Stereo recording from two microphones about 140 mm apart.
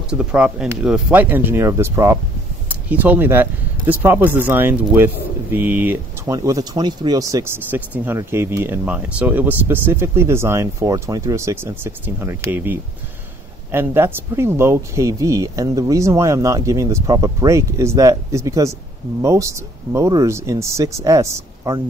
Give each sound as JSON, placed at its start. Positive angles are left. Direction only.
{"t": 0.1, "sound": "speech", "side_deg": -5}
{"t": 6.3, "sound": "speech", "side_deg": -25}